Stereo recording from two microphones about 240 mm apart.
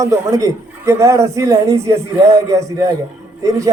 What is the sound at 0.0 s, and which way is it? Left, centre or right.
A man's voice, centre.